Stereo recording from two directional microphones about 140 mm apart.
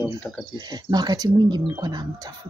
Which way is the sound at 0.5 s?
30° right (ahead or behind).